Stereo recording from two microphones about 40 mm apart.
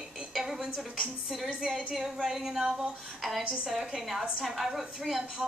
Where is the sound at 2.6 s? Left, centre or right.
Right.